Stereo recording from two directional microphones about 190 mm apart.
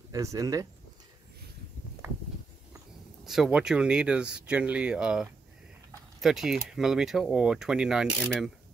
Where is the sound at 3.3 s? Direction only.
5° right (ahead or behind).